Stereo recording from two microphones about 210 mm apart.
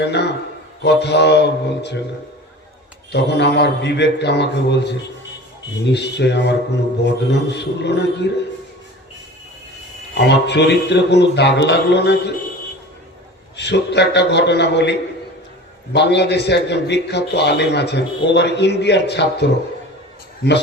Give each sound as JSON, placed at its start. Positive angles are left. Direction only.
{"t": 0.0, "sound": "a man's voice", "side_deg": 55}
{"t": 3.1, "sound": "a man's voice", "side_deg": 55}
{"t": 10.2, "sound": "a man's voice", "side_deg": 55}
{"t": 13.6, "sound": "a man's voice", "side_deg": 55}